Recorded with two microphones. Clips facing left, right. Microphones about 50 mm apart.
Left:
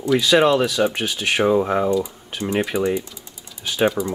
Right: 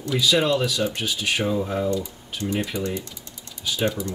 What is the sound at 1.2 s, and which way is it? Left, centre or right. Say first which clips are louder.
Speech: left 7 dB; left.